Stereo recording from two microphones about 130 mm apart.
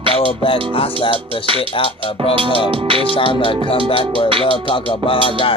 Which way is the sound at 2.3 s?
45° right (ahead or behind).